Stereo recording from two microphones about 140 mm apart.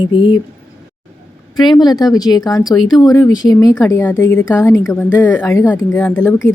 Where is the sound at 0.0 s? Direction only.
35° left (ahead or behind).